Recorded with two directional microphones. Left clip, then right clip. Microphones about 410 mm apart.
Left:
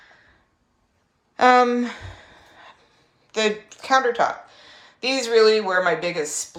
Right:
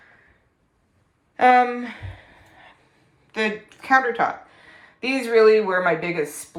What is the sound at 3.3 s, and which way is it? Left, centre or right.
A woman's voice, centre.